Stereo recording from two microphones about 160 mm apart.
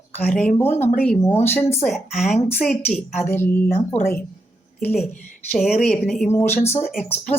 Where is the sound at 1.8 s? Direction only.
Centre (ahead or behind).